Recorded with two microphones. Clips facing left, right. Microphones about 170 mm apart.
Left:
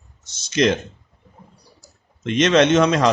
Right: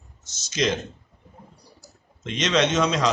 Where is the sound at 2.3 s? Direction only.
55° left (ahead or behind).